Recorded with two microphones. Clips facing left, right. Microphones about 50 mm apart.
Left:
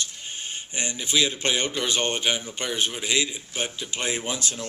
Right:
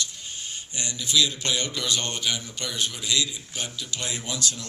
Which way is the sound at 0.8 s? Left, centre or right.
Left.